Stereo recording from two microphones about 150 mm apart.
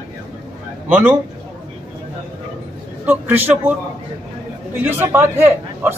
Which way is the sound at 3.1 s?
10° right (ahead or behind).